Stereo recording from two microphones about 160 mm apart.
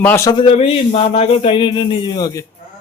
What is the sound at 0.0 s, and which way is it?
Speech, 15° left (ahead or behind).